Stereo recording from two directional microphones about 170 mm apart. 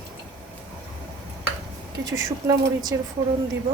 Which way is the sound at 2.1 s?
20° right (ahead or behind).